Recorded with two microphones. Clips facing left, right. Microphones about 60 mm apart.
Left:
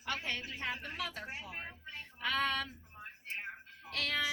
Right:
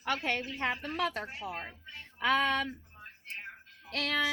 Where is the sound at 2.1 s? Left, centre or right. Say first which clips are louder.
Right 6 dB; right.